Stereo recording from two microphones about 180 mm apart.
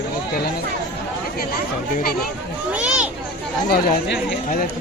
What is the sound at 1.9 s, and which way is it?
Speech, 55° left (ahead or behind).